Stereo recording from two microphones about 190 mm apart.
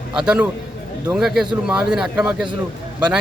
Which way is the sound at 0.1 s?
5° right (ahead or behind).